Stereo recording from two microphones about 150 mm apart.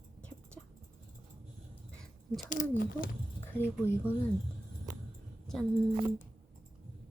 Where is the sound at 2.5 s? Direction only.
70° left (ahead or behind).